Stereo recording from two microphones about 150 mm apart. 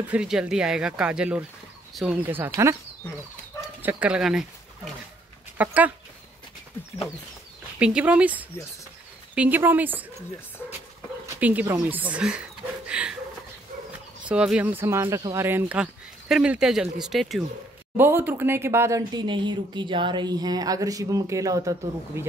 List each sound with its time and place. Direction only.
0.1 s speech: 5° right (ahead or behind)
3.8 s speech: 10° right (ahead or behind)
7.8 s speech: 10° right (ahead or behind)
11.2 s dog: 10° right (ahead or behind)
11.9 s speech: 10° right (ahead or behind)
12.8 s a sound: 5° right (ahead or behind)
14.3 s speech: 5° right (ahead or behind)
17.9 s speech: 15° right (ahead or behind)